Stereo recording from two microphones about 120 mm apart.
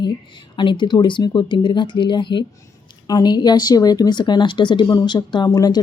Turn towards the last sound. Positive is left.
turn(degrees=30)  # may be behind; listen again after turning